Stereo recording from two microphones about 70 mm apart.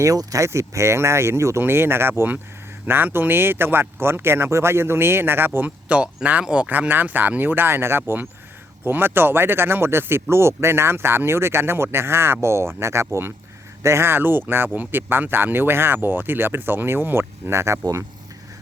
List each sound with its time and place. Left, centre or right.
0.0 s speech: right
5.9 s speech: centre
6.7 s speech: right